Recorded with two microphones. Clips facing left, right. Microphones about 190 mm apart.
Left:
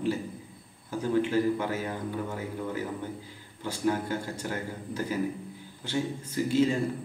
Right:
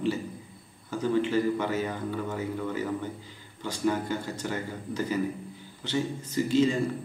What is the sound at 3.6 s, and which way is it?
A man's voice, 10° left (ahead or behind).